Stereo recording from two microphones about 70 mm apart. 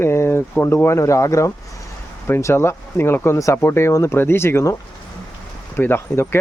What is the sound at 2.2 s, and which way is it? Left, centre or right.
Speech, left.